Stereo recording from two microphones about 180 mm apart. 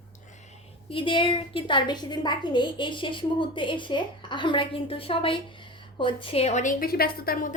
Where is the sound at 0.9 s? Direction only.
30° left (ahead or behind).